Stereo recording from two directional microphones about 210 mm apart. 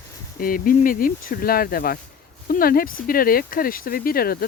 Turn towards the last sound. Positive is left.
turn(degrees=45)  # may be behind; listen again after turning